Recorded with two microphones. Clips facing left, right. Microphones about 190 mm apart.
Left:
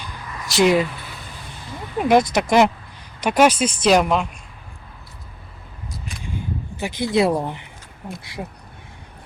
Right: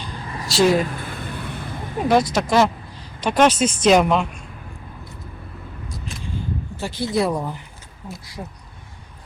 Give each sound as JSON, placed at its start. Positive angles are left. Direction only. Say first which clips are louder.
{"t": 0.5, "sound": "speech", "louder": "even", "side_deg": 15}
{"t": 0.8, "sound": "a sound", "louder": "left 1 dB", "side_deg": -50}
{"t": 2.0, "sound": "speech", "louder": "left 2 dB", "side_deg": 15}
{"t": 6.7, "sound": "speech", "louder": "left 3 dB", "side_deg": 15}